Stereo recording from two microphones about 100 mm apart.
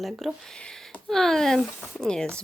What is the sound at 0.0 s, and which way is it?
Speech, centre (ahead or behind).